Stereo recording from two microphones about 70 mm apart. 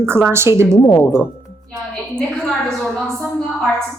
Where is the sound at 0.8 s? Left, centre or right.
Left.